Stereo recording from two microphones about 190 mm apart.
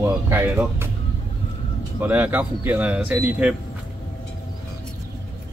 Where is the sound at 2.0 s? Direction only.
10° right (ahead or behind).